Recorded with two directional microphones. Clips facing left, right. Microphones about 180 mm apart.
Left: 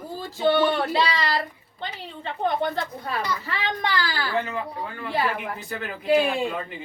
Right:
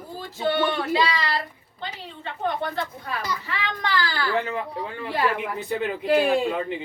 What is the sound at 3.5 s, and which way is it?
Speech, 40° left (ahead or behind).